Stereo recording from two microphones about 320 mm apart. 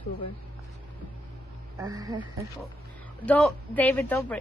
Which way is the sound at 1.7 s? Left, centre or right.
Centre.